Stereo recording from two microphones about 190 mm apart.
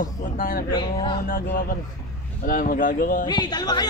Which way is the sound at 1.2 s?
50° left (ahead or behind).